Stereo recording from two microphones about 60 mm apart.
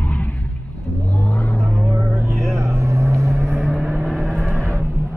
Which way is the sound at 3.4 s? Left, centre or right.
Centre.